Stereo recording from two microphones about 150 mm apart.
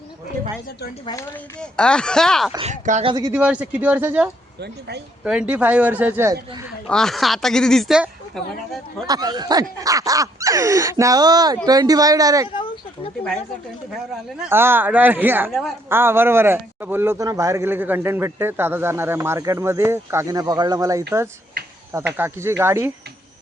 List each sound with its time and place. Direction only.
1.7 s speech: 5° left (ahead or behind)
2.6 s speech: 50° right (ahead or behind)
3.3 s a man's voice: 5° right (ahead or behind)
6.8 s speech: 5° left (ahead or behind)
9.0 s speech: 25° right (ahead or behind)
13.9 s speech: 5° right (ahead or behind)
14.5 s a man's voice: 15° right (ahead or behind)
15.4 s speech: centre (ahead or behind)
15.9 s a man's voice: 15° right (ahead or behind)